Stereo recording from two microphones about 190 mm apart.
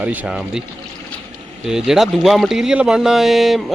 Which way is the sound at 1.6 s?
Centre (ahead or behind).